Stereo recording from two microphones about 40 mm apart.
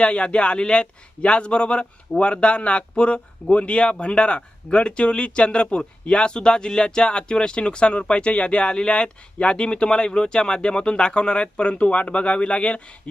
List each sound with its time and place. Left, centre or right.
0.0 s speech: left